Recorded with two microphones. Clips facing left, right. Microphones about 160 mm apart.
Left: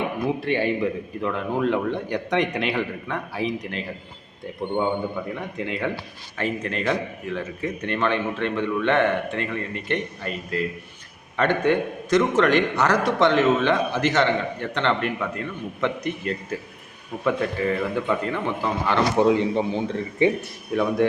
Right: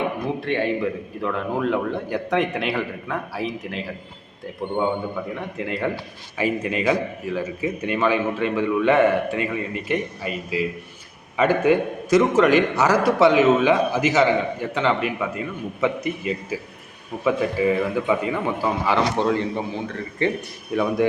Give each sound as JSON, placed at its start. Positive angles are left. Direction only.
{"t": 0.3, "sound": "a man's voice", "side_deg": 0}
{"t": 5.3, "sound": "a man's voice", "side_deg": 0}
{"t": 19.1, "sound": "a man's voice", "side_deg": 15}
{"t": 20.7, "sound": "a man's voice", "side_deg": 0}